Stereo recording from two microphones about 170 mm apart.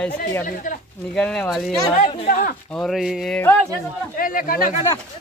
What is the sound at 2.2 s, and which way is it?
Speech, 50° left (ahead or behind).